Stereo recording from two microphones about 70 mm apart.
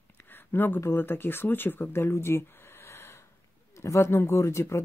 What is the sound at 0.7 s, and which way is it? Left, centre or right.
Speech, left.